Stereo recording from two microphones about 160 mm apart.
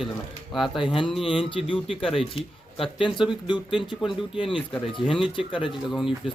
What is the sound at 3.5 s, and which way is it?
A man's voice, 30° left (ahead or behind).